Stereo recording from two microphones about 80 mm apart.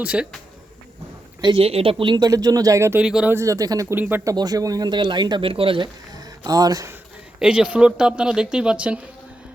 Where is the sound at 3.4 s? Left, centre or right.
Right.